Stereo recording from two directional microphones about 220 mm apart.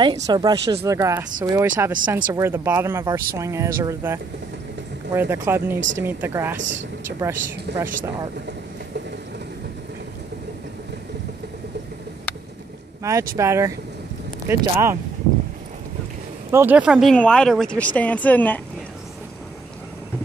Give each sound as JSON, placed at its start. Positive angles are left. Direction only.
{"t": 0.0, "sound": "speech", "side_deg": -20}
{"t": 5.8, "sound": "speech", "side_deg": -55}
{"t": 6.0, "sound": "speech", "side_deg": -10}
{"t": 6.6, "sound": "speech", "side_deg": -55}
{"t": 7.2, "sound": "speech", "side_deg": -10}
{"t": 13.4, "sound": "speech", "side_deg": -15}
{"t": 16.5, "sound": "speech", "side_deg": -5}